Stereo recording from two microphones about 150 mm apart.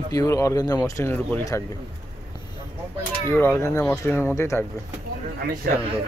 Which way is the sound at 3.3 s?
15° left (ahead or behind).